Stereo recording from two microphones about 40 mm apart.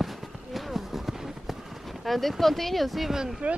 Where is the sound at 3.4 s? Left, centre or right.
Right.